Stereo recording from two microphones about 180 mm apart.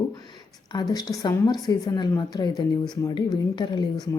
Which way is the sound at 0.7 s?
25° left (ahead or behind).